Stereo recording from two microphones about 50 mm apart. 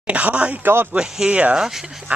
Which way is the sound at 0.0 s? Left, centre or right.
Right.